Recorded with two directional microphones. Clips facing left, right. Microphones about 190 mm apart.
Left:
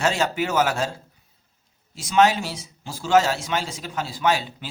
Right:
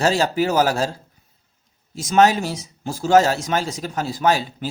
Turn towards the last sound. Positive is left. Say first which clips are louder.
# right 3 dB
turn(degrees=-40)  # may be behind; listen again after turning